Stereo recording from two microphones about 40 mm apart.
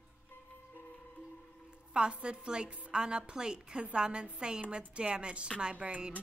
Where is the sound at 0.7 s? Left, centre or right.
Left.